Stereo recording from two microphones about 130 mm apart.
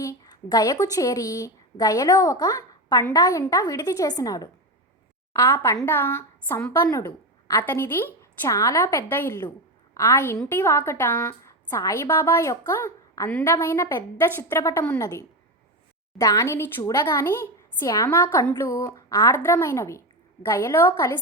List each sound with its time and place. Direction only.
0.0 s a woman's voice: 30° left (ahead or behind)